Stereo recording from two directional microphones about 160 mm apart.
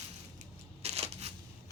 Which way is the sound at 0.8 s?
40° right (ahead or behind).